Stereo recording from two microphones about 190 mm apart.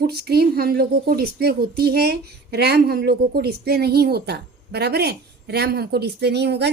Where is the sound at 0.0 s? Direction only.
55° right (ahead or behind).